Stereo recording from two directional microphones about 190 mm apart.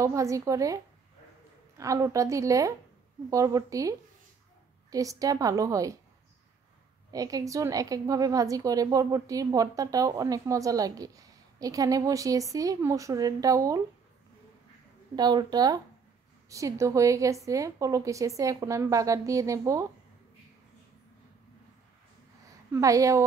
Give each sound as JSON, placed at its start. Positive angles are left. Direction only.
{"t": 0.0, "sound": "a woman's voice", "side_deg": -15}
{"t": 1.8, "sound": "a woman's voice", "side_deg": -15}
{"t": 4.9, "sound": "a woman's voice", "side_deg": -20}
{"t": 7.1, "sound": "a woman's voice", "side_deg": -20}
{"t": 15.1, "sound": "a woman's voice", "side_deg": -20}
{"t": 22.7, "sound": "a woman's voice", "side_deg": -15}